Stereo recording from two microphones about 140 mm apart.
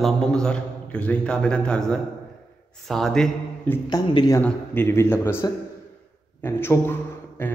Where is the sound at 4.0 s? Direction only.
25° left (ahead or behind).